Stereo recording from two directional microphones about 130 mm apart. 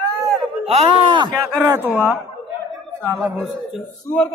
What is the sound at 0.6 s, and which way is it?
Speech, 45° right (ahead or behind).